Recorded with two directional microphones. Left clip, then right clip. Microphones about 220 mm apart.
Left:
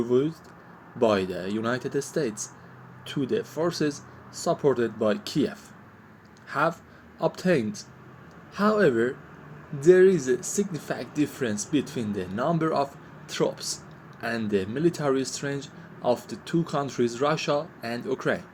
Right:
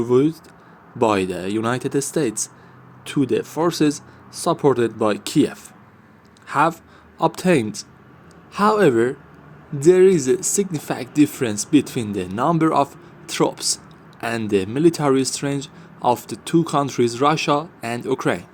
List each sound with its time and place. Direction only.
0.0 s speech: 55° right (ahead or behind)